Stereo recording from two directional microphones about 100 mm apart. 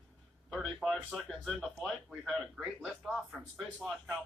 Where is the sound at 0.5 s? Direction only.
Centre (ahead or behind).